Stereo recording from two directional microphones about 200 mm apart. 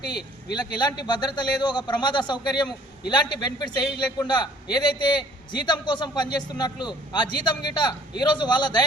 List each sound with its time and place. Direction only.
0.5 s a man's voice: 20° left (ahead or behind)